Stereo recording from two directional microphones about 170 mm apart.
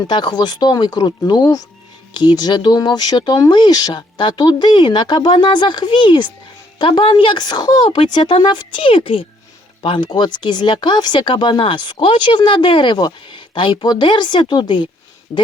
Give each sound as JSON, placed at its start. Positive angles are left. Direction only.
{"t": 0.1, "sound": "speech", "side_deg": 25}
{"t": 7.9, "sound": "speech", "side_deg": 40}
{"t": 8.1, "sound": "speech", "side_deg": 25}